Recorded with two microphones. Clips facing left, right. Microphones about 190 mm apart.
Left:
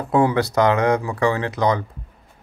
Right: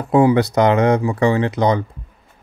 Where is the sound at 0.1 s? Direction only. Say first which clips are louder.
Right 5 dB; 15° right (ahead or behind).